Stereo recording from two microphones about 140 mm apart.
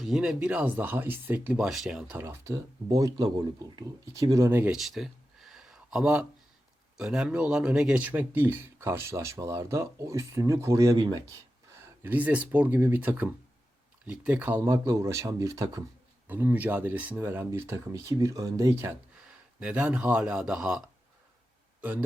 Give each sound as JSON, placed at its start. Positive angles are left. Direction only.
{"t": 0.0, "sound": "speech", "side_deg": 0}
{"t": 2.2, "sound": "speech", "side_deg": -20}
{"t": 4.8, "sound": "a sound", "side_deg": 0}
{"t": 6.9, "sound": "speech", "side_deg": -5}
{"t": 12.0, "sound": "speech", "side_deg": -10}
{"t": 16.2, "sound": "speech", "side_deg": -15}